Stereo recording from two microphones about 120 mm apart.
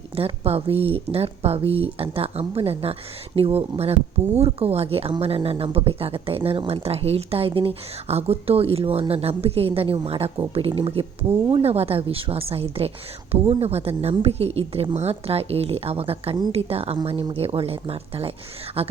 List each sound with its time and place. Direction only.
0.2 s a woman's voice: 55° right (ahead or behind)
17.0 s a woman's voice: 45° right (ahead or behind)